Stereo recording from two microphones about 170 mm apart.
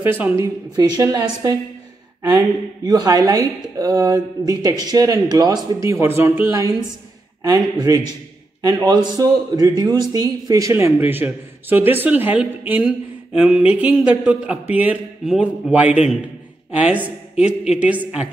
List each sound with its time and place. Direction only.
0.0 s a man's voice: 10° right (ahead or behind)
0.7 s a woman's voice: 25° right (ahead or behind); by 18.3 s 5° right (ahead or behind)